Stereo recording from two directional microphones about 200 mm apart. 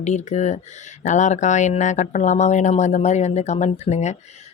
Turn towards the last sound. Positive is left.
turn(degrees=35)  # may be behind; listen again after turning